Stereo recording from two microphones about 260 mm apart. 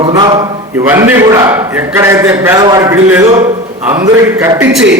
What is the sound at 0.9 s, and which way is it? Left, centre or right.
A man's voice, centre.